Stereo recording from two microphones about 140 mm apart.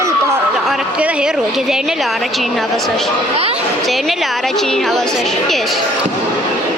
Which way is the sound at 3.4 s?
45° right (ahead or behind).